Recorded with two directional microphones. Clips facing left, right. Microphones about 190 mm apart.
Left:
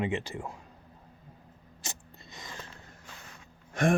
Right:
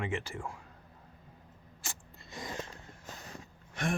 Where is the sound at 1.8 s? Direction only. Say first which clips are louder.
Left 3 dB; 20° left (ahead or behind).